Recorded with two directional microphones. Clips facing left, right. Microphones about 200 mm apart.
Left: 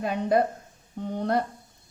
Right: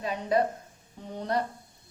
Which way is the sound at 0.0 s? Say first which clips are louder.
Left 4 dB; 55° left (ahead or behind).